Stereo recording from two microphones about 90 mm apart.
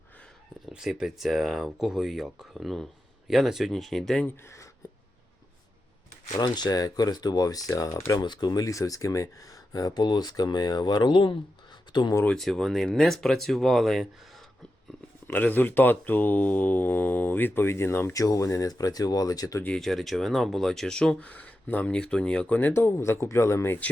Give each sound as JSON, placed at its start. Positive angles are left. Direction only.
{"t": 0.7, "sound": "speech", "side_deg": -5}
{"t": 4.4, "sound": "speech", "side_deg": 35}
{"t": 6.3, "sound": "speech", "side_deg": 50}
{"t": 8.2, "sound": "speech", "side_deg": 55}
{"t": 12.4, "sound": "speech", "side_deg": 5}
{"t": 15.3, "sound": "speech", "side_deg": 20}
{"t": 18.1, "sound": "speech", "side_deg": 40}
{"t": 19.6, "sound": "speech", "side_deg": 5}